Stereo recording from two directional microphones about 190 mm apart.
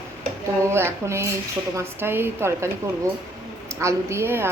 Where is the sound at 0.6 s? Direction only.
15° right (ahead or behind).